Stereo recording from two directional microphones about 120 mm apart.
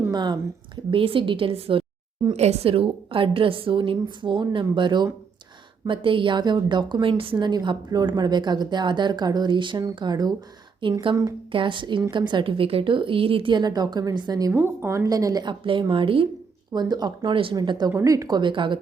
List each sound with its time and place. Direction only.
0.1 s speech: 35° right (ahead or behind)
0.9 s a woman's voice: 50° right (ahead or behind)
14.5 s a woman's voice: 20° right (ahead or behind); by 16.2 s 45° right (ahead or behind)
16.7 s a woman's voice: 35° right (ahead or behind)